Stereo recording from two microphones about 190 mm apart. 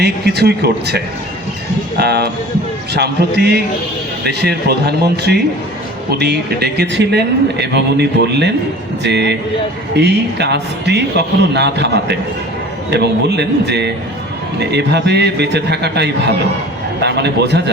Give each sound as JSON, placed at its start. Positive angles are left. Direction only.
{"t": 0.0, "sound": "a man's voice", "side_deg": -60}